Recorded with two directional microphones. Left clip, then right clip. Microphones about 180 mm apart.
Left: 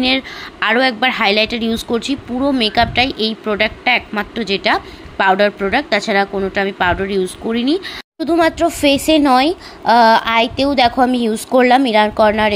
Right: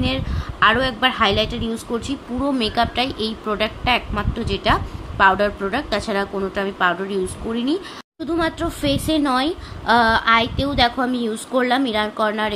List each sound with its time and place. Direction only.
0.0 s a woman's voice: 20° left (ahead or behind)
8.2 s a woman's voice: 40° left (ahead or behind)